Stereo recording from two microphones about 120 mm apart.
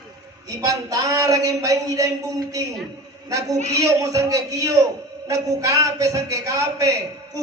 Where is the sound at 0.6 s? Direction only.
30° right (ahead or behind).